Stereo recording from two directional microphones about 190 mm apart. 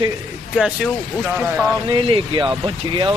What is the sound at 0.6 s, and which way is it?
Speech, 5° right (ahead or behind).